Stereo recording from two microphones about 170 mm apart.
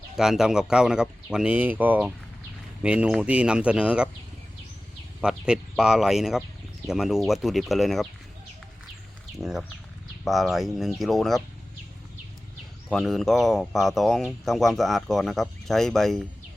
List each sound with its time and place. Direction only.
0.2 s speech: 5° right (ahead or behind)
5.2 s speech: 5° right (ahead or behind)
9.3 s speech: centre (ahead or behind)
12.9 s speech: centre (ahead or behind)